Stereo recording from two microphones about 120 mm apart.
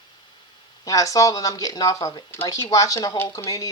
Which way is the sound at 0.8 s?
30° left (ahead or behind).